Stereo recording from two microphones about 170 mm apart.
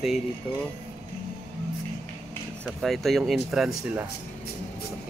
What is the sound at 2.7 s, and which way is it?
Speech, centre (ahead or behind).